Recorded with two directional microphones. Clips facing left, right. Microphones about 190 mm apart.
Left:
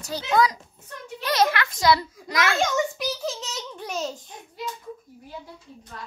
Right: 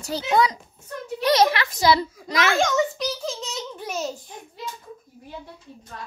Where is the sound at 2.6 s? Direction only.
5° left (ahead or behind).